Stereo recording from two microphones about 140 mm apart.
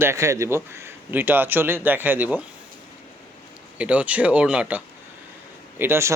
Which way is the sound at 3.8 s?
10° right (ahead or behind).